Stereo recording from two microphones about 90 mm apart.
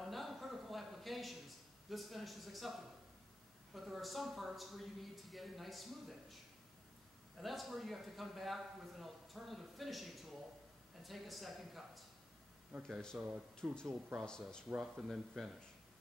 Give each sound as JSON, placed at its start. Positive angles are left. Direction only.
{"t": 0.0, "sound": "a sound", "side_deg": 0}
{"t": 1.9, "sound": "a man's voice", "side_deg": 0}
{"t": 7.3, "sound": "a man's voice", "side_deg": 0}
{"t": 13.1, "sound": "speech", "side_deg": -15}
{"t": 13.7, "sound": "speech", "side_deg": 5}
{"t": 14.8, "sound": "a man's voice", "side_deg": -5}